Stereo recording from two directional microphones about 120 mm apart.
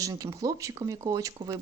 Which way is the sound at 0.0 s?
30° right (ahead or behind).